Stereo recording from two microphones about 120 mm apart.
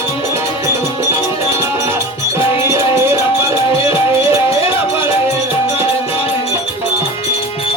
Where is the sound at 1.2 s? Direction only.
20° right (ahead or behind).